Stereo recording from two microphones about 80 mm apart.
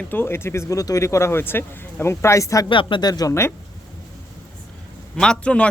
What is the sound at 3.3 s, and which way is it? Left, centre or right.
Speech, left.